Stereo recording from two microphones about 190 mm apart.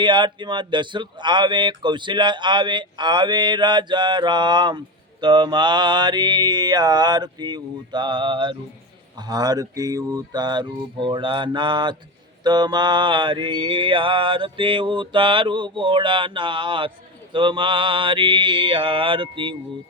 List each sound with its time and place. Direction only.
0.0 s speech: 25° right (ahead or behind)